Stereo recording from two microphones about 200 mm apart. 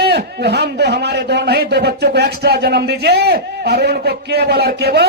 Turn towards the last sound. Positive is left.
turn(degrees=-55)  # may be behind; listen again after turning